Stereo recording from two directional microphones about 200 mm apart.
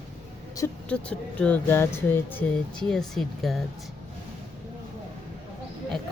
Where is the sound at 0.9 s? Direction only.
5° left (ahead or behind).